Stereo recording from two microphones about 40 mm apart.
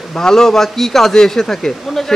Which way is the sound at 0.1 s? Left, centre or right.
Centre.